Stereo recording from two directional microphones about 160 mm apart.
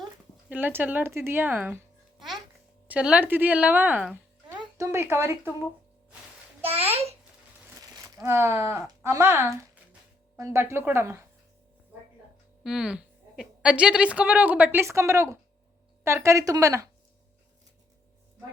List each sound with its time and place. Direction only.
0.5 s a child's voice: 10° right (ahead or behind)
6.7 s a sound: 40° right (ahead or behind)
7.8 s a woman's voice: 20° right (ahead or behind)
12.6 s a woman's voice: 5° right (ahead or behind); by 16.9 s 20° right (ahead or behind)